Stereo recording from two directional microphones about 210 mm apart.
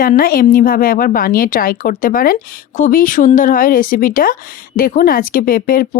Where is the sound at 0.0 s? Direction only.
45° left (ahead or behind).